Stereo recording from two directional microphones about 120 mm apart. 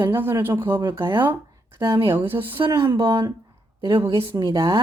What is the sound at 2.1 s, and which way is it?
Speech, 15° right (ahead or behind).